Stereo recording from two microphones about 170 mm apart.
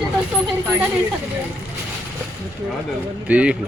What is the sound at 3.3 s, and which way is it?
Speech, 5° right (ahead or behind).